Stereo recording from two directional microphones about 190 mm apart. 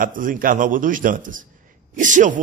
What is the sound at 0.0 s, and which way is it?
A man's voice, 45° right (ahead or behind).